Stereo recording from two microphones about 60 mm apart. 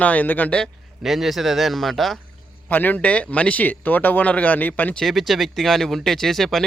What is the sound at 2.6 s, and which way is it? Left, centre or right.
A man's voice, left.